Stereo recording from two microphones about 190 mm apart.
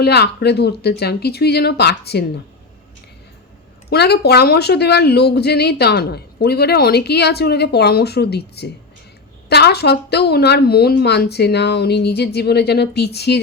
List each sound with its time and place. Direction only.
0.0 s speech: 60° left (ahead or behind)
3.8 s speech: 60° left (ahead or behind)